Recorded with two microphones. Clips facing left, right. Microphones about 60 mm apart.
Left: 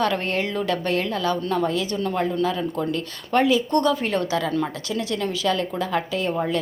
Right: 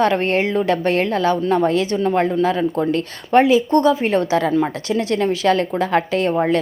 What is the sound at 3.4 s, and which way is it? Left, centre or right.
A woman's voice, right.